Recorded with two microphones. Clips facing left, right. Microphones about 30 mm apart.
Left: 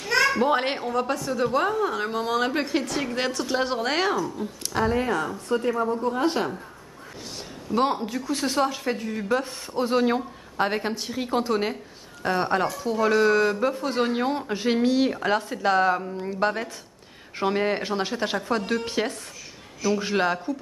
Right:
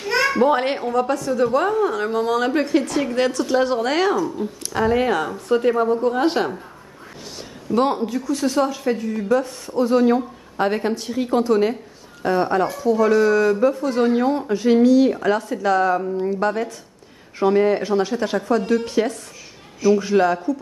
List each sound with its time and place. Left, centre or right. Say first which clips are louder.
0.0 s a sound: right 3 dB; centre
0.5 s a woman's voice: right 4 dB; centre
4.9 s a woman's voice: right 5 dB; right
7.3 s a woman's voice: right 4 dB; centre
8.3 s speech: right 3 dB; left
10.6 s a woman's voice: right 4 dB; centre; by 20.3 s left